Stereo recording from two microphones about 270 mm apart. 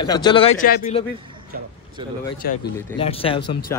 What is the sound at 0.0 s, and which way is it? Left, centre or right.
Speech, centre.